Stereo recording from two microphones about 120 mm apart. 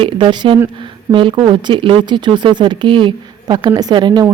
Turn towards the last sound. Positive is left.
turn(degrees=-40)  # may be behind; listen again after turning